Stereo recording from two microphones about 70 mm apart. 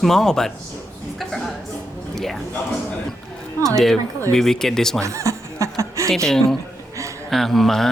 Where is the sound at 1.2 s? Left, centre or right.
Centre.